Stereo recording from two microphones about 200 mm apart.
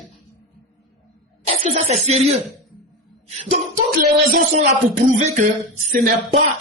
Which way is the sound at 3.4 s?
35° right (ahead or behind).